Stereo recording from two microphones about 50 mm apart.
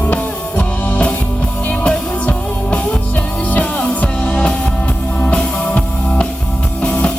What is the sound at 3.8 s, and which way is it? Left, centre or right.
Music, left.